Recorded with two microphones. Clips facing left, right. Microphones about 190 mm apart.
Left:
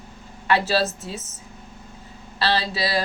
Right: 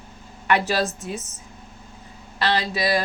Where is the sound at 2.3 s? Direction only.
15° right (ahead or behind).